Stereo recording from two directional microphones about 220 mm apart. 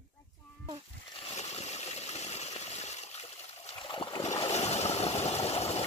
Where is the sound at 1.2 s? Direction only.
30° left (ahead or behind).